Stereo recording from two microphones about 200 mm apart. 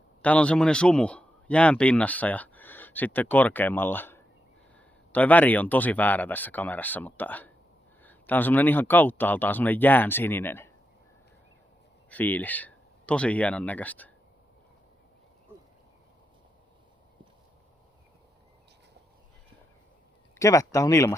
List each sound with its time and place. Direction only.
0.2 s speech: 5° left (ahead or behind)
12.1 s speech: 10° left (ahead or behind)
20.4 s speech: 15° left (ahead or behind)